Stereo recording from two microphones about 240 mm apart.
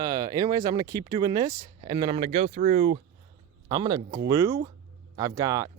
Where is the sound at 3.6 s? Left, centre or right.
Centre.